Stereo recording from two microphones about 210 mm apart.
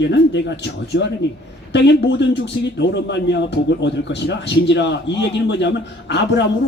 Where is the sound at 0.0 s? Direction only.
55° left (ahead or behind).